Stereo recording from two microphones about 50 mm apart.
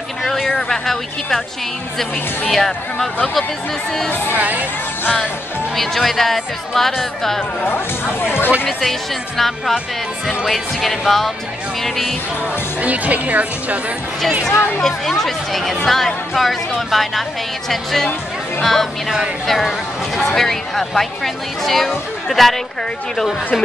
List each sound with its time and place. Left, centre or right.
0.2 s a sound: centre
0.6 s speech: centre
2.5 s speech: centre
4.1 s speech: left
4.4 s speech: right
5.8 s speech: centre
7.6 s speech: left
10.2 s speech: centre
12.8 s speech: right
14.5 s speech: left
14.8 s speech: centre
19.0 s speech: centre
19.4 s speech: centre